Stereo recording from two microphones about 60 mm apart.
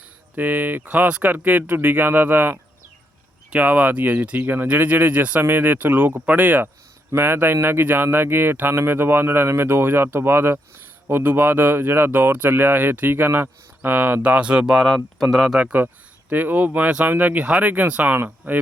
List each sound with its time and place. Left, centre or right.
0.3 s speech: right
3.6 s speech: right
14.8 s speech: centre
15.5 s speech: right